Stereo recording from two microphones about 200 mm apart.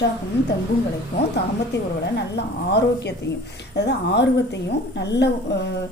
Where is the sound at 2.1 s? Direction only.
55° left (ahead or behind).